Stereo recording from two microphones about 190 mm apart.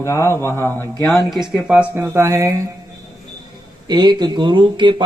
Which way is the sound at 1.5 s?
5° right (ahead or behind).